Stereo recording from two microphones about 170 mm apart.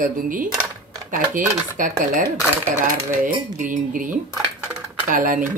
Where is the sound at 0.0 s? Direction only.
55° right (ahead or behind).